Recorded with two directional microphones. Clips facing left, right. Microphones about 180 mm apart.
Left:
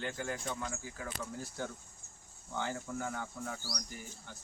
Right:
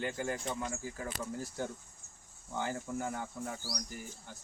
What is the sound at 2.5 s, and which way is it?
Speech, 10° right (ahead or behind).